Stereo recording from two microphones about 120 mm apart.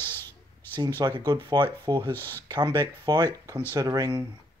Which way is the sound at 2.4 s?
35° right (ahead or behind).